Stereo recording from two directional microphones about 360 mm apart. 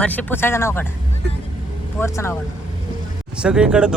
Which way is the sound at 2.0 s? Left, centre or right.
Centre.